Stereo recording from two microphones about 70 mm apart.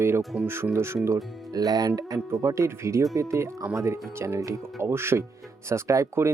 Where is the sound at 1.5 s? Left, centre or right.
Right.